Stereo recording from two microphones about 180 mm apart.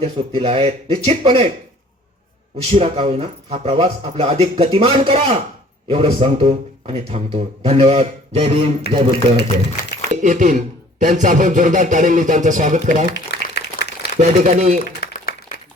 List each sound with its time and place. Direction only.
0.0 s speech: 30° right (ahead or behind)
2.6 s speech: 30° right (ahead or behind)
10.1 s speech: 45° right (ahead or behind)
13.1 s a sound: 70° left (ahead or behind)
14.2 s speech: 40° right (ahead or behind)
15.0 s applause: 55° left (ahead or behind)